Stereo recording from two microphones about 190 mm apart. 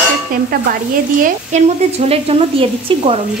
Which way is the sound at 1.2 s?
35° right (ahead or behind).